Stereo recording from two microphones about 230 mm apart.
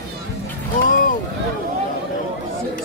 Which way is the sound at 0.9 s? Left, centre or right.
Left.